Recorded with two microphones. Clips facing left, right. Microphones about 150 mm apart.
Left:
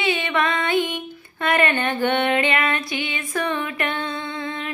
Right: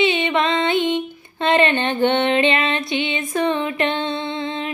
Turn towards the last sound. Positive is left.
turn(degrees=-20)  # may be behind; listen again after turning